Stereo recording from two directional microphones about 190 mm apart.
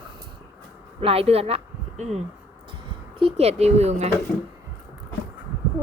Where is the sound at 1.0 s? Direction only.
30° right (ahead or behind).